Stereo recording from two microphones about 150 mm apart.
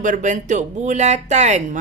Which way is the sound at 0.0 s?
60° right (ahead or behind).